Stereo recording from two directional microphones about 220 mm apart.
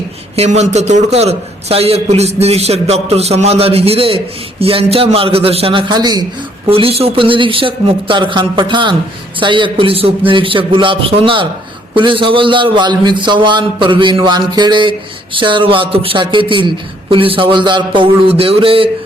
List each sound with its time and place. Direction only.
0.3 s a man's voice: 30° right (ahead or behind)